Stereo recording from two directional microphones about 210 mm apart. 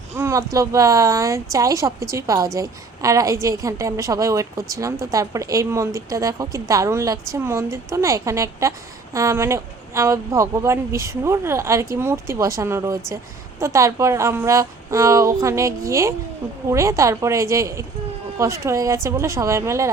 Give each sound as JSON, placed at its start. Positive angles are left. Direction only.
{"t": 0.2, "sound": "a woman's voice", "side_deg": -15}